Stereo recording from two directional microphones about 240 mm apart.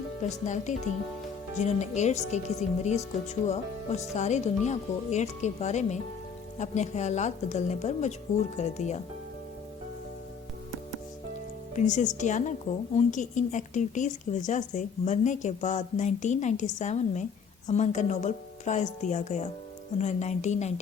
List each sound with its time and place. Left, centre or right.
0.2 s speech: left
11.7 s speech: left